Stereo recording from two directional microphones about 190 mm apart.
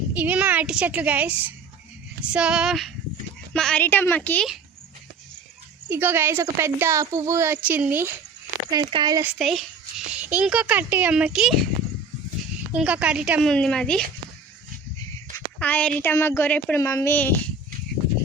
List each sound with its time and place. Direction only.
0.1 s a woman's voice: 10° right (ahead or behind); by 4.4 s 10° left (ahead or behind)
5.9 s a woman's voice: 10° right (ahead or behind)
8.7 s speech: 25° right (ahead or behind)
9.2 s a woman's voice: centre (ahead or behind)
12.7 s a woman's voice: 5° right (ahead or behind)
15.5 s a woman's voice: 5° left (ahead or behind)